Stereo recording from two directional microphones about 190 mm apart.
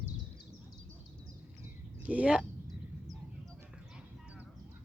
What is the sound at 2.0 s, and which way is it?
Speech, 5° right (ahead or behind).